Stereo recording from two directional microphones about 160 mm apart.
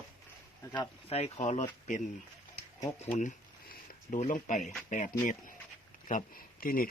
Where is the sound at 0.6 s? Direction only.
20° left (ahead or behind).